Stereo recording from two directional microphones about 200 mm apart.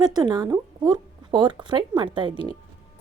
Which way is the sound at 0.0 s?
20° right (ahead or behind).